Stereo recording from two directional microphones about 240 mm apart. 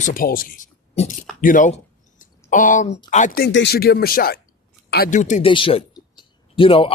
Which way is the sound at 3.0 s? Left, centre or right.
Left.